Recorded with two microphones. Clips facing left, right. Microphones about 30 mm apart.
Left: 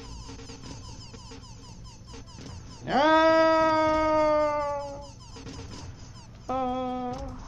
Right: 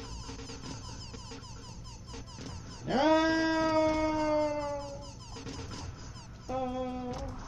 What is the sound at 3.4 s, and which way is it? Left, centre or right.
Siren, left.